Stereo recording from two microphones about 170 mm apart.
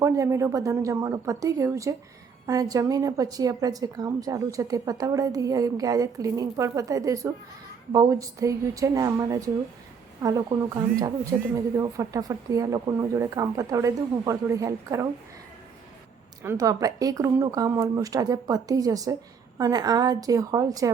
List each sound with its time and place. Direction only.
0.0 s a woman's voice: 15° right (ahead or behind)
16.4 s a woman's voice: 20° right (ahead or behind)